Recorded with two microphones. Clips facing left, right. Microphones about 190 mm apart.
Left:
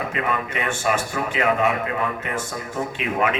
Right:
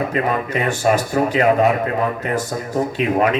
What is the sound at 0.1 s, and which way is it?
A man's voice, 35° right (ahead or behind).